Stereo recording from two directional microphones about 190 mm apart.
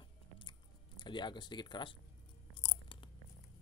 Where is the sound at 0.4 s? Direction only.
25° left (ahead or behind).